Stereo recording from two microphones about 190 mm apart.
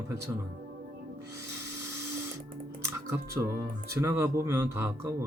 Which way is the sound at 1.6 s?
15° right (ahead or behind).